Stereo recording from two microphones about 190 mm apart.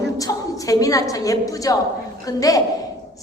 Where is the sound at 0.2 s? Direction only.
20° left (ahead or behind).